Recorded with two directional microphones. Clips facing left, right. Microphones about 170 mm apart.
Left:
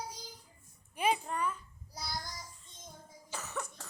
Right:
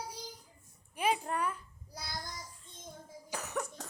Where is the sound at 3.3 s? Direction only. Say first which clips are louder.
Right 3 dB; 15° right (ahead or behind).